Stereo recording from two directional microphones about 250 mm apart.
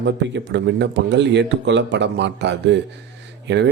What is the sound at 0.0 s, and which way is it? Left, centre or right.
Speech, right.